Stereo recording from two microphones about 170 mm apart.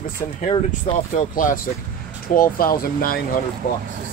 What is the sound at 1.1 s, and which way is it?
Speech, 50° left (ahead or behind).